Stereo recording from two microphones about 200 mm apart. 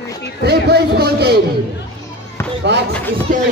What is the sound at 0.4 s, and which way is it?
Speech, 55° right (ahead or behind).